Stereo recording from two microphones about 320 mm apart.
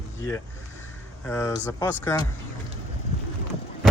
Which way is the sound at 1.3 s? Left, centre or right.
Centre.